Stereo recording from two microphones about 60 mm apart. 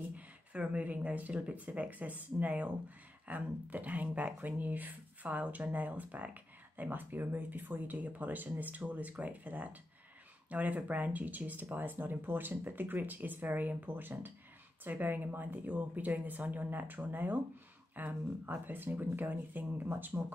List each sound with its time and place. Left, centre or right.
0.1 s speech: right